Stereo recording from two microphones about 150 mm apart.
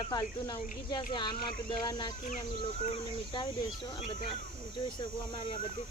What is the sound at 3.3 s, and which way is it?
Speech, 30° left (ahead or behind).